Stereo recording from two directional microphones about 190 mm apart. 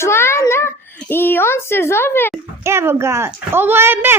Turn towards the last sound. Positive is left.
turn(degrees=-10)  # may be behind; listen again after turning